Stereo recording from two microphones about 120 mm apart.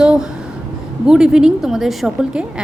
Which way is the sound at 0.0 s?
10° right (ahead or behind).